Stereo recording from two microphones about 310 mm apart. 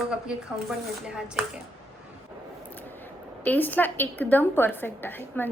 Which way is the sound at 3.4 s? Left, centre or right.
Centre.